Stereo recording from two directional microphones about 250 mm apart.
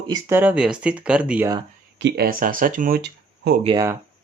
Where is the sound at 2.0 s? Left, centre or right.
Right.